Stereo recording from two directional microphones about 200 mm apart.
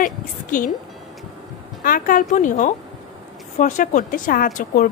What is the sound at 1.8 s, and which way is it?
A woman's voice, 45° left (ahead or behind).